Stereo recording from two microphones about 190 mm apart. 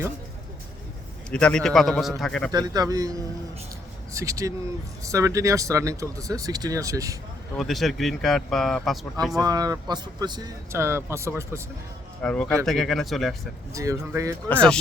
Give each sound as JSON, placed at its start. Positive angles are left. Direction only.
{"t": 1.3, "sound": "speech", "side_deg": 5}
{"t": 2.5, "sound": "a man's voice", "side_deg": -20}
{"t": 7.5, "sound": "speech", "side_deg": 0}
{"t": 9.4, "sound": "a man's voice", "side_deg": -20}
{"t": 12.2, "sound": "speech", "side_deg": 5}
{"t": 13.7, "sound": "speech", "side_deg": -15}
{"t": 14.5, "sound": "speech", "side_deg": 5}